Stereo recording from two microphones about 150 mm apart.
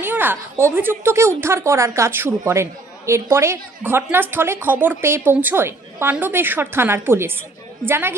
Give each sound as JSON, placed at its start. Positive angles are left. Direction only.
{"t": 0.0, "sound": "a woman's voice", "side_deg": -15}